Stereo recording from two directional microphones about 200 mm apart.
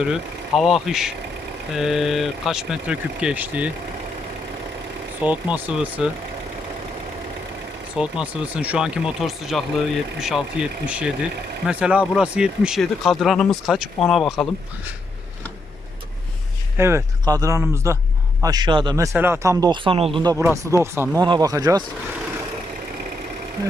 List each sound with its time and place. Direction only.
0.0 s speech: centre (ahead or behind)
5.2 s speech: 5° right (ahead or behind)
7.9 s speech: 5° right (ahead or behind)
16.7 s speech: 15° right (ahead or behind)